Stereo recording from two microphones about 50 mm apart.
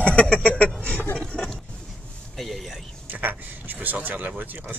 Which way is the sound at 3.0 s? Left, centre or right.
Right.